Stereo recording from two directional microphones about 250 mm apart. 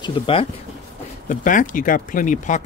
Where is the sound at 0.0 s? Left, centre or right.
Left.